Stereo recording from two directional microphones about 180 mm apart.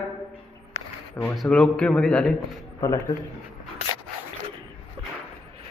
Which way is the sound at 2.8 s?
20° left (ahead or behind).